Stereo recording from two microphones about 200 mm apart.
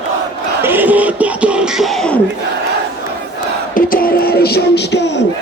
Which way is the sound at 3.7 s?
45° left (ahead or behind).